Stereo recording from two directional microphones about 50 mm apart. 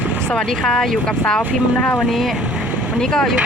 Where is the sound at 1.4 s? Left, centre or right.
Left.